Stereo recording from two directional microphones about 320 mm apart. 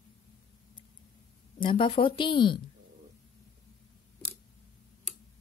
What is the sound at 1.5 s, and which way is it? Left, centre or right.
Speech, centre.